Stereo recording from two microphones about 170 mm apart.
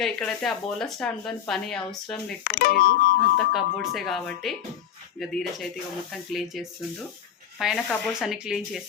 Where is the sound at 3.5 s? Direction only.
Centre (ahead or behind).